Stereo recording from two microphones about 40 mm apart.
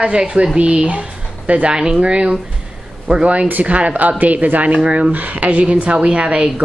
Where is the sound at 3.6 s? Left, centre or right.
Right.